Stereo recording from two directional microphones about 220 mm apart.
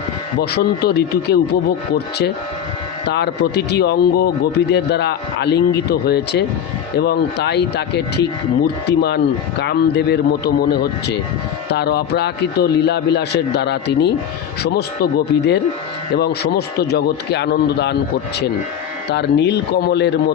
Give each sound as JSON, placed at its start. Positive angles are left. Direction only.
{"t": 0.5, "sound": "speech", "side_deg": 45}
{"t": 3.1, "sound": "speech", "side_deg": 50}
{"t": 19.1, "sound": "speech", "side_deg": 50}